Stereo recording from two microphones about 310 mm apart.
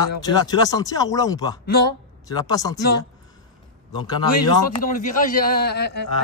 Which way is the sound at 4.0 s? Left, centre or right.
Centre.